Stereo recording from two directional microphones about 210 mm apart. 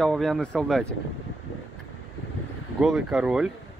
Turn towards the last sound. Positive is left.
turn(degrees=-5)  # may be behind; listen again after turning